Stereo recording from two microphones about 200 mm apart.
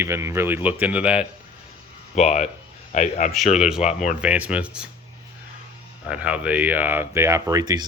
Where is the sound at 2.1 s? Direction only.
35° left (ahead or behind).